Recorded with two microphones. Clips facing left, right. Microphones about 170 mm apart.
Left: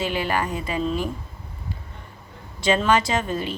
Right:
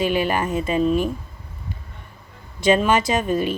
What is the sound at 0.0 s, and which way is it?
A woman's voice, 15° right (ahead or behind).